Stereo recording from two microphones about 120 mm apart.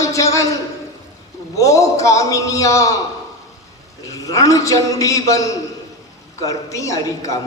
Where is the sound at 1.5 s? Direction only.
25° left (ahead or behind).